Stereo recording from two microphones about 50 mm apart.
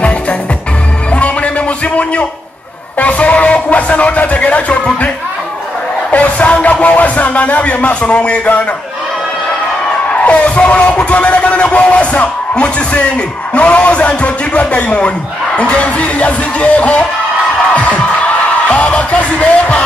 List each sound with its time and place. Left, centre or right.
1.1 s music: left
3.0 s music: left
6.1 s music: left
10.1 s a man's voice: left
17.7 s music: left